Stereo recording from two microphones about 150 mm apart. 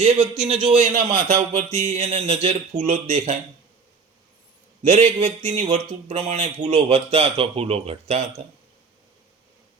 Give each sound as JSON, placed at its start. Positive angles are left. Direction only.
{"t": 0.0, "sound": "speech", "side_deg": -45}
{"t": 4.8, "sound": "speech", "side_deg": -45}